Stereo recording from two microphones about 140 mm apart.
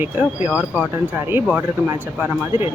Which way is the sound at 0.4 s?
10° right (ahead or behind).